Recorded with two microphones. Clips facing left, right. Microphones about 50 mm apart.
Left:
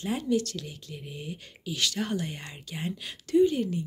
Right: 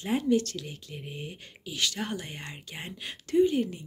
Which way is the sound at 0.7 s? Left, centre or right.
Right.